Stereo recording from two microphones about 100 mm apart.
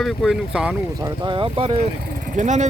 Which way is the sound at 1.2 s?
55° right (ahead or behind).